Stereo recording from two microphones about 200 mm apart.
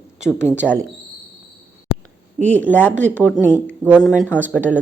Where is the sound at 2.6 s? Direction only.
10° left (ahead or behind).